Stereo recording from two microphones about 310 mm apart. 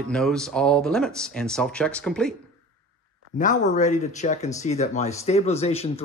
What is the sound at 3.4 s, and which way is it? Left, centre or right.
Speech, left.